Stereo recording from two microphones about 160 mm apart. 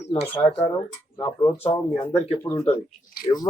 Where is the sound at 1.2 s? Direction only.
25° left (ahead or behind).